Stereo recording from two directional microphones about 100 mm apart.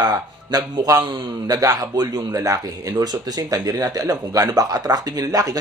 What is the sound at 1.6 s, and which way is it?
Speech, 35° right (ahead or behind).